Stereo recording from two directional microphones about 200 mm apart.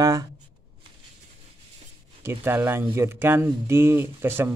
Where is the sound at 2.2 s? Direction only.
10° right (ahead or behind).